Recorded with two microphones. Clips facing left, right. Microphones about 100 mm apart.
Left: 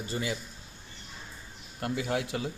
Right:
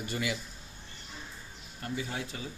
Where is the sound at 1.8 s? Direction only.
75° left (ahead or behind).